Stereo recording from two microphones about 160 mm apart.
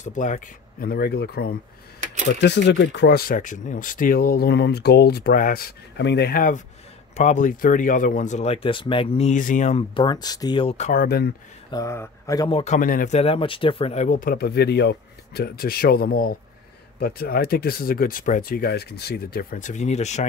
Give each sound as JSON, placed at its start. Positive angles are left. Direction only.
{"t": 0.0, "sound": "speech", "side_deg": 50}
{"t": 7.2, "sound": "speech", "side_deg": 50}
{"t": 9.9, "sound": "speech", "side_deg": 25}
{"t": 10.9, "sound": "speech", "side_deg": 65}
{"t": 11.7, "sound": "speech", "side_deg": 20}
{"t": 12.4, "sound": "a man's voice", "side_deg": 35}
{"t": 12.7, "sound": "speech", "side_deg": 55}
{"t": 14.3, "sound": "speech", "side_deg": 80}